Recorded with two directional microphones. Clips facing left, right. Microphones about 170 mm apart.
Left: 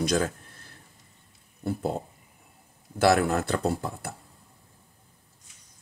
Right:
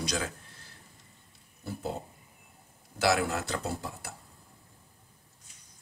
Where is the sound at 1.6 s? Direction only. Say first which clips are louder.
Left 9 dB; 55° left (ahead or behind).